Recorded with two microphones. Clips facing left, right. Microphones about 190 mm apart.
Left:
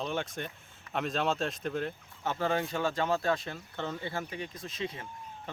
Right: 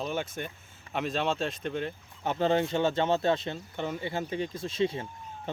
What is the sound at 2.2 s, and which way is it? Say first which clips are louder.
A man's voice: right 5 dB; 20° right (ahead or behind).